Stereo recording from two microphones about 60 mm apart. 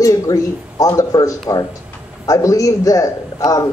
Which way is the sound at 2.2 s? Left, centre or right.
Left.